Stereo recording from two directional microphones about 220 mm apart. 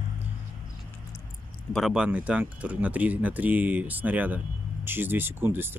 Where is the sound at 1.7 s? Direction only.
Centre (ahead or behind).